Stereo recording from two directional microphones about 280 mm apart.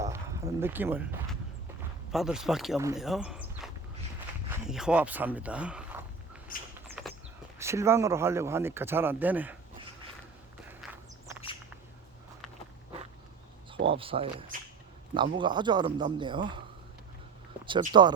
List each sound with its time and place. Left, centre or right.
0.0 s a sound: centre
2.1 s speech: centre
7.6 s speech: centre
13.8 s speech: centre
17.7 s speech: centre